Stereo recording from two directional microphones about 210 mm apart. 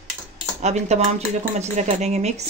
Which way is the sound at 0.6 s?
30° right (ahead or behind).